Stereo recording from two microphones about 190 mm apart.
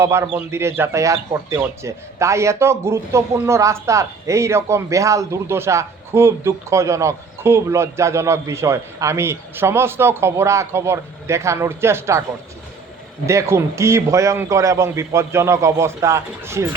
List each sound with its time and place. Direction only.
0.0 s speech: 15° right (ahead or behind)
13.2 s speech: 15° right (ahead or behind)